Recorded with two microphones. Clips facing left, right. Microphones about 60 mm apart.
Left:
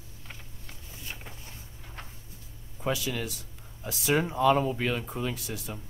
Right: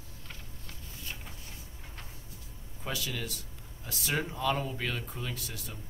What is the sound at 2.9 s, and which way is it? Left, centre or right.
Speech, centre.